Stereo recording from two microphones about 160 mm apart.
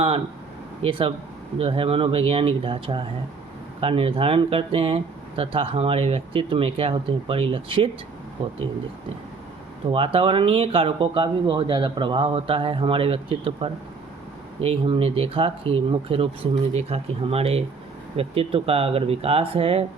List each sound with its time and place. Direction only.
0.8 s speech: 35° right (ahead or behind)
9.9 s speech: 35° right (ahead or behind)